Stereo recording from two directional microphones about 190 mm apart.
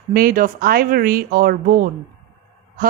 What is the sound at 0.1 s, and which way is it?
A woman's voice, 50° right (ahead or behind).